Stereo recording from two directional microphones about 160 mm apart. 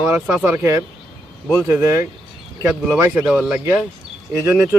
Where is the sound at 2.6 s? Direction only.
Centre (ahead or behind).